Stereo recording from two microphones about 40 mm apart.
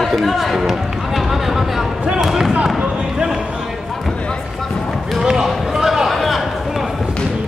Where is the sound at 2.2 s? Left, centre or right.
Centre.